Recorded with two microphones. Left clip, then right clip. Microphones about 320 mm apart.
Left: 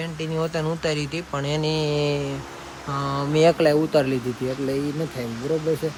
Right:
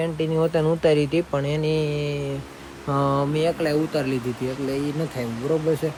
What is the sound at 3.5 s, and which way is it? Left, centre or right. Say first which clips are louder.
Speech: left 6 dB; left.